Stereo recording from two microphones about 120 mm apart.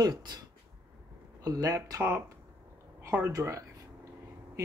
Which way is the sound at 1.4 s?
30° right (ahead or behind).